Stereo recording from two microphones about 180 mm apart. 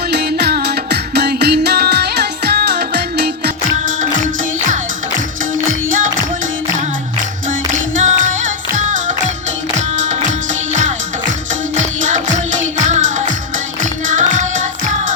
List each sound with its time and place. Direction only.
0.1 s music: 65° right (ahead or behind)
7.9 s music: 45° right (ahead or behind)
11.8 s music: 45° right (ahead or behind)